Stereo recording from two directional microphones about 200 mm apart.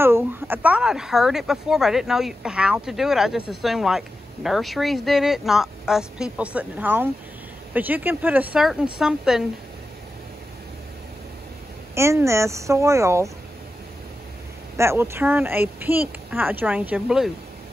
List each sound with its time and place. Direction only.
0.0 s speech: 10° right (ahead or behind)
11.9 s speech: 15° right (ahead or behind)
14.8 s speech: 15° right (ahead or behind)